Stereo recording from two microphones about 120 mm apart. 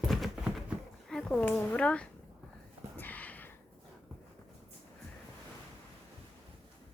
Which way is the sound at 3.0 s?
15° left (ahead or behind).